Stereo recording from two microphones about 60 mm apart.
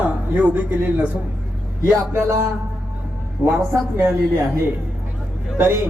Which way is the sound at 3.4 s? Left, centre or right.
Right.